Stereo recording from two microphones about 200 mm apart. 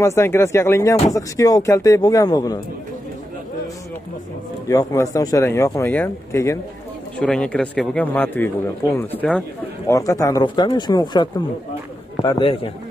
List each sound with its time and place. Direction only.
0.0 s speech: 15° left (ahead or behind)
4.6 s speech: 15° left (ahead or behind)